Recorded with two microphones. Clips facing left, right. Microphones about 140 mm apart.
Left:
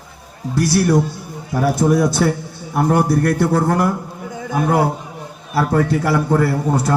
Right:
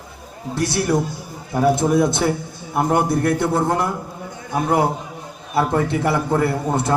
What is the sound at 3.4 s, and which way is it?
Speech, 25° right (ahead or behind).